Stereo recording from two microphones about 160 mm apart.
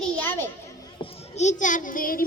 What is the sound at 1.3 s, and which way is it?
Speech, 50° left (ahead or behind).